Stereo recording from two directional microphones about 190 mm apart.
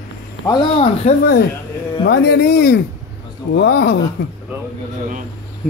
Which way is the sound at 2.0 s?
55° left (ahead or behind).